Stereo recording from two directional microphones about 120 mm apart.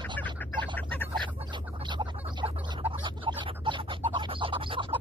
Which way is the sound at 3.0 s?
40° right (ahead or behind).